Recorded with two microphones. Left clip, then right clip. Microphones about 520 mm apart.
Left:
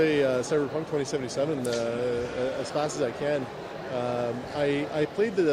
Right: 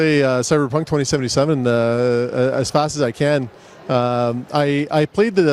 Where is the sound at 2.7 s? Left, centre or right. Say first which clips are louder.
Right 10 dB; right.